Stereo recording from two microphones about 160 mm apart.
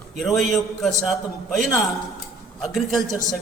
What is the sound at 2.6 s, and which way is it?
Speech, centre (ahead or behind).